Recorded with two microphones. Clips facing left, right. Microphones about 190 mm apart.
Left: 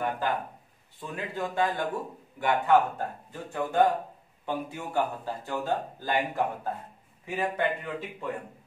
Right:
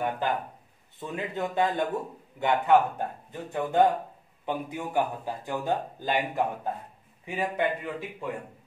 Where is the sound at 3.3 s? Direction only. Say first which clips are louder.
Right 2 dB; 20° right (ahead or behind).